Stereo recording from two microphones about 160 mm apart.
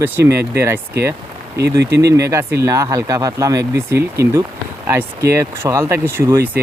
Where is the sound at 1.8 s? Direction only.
90° right.